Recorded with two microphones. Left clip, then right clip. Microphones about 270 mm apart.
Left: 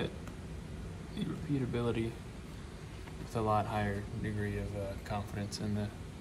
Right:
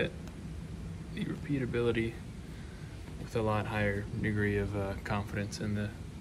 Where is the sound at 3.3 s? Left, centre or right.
Centre.